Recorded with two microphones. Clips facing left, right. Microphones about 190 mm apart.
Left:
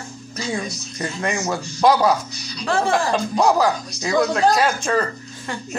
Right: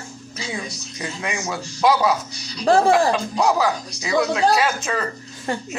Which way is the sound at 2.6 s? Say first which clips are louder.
Right 5 dB; 35° right (ahead or behind).